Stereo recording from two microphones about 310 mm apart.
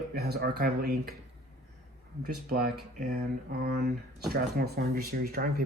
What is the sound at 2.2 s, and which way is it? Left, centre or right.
Speech, right.